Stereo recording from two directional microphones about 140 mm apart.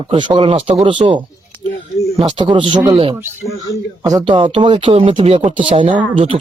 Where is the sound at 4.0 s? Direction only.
30° right (ahead or behind).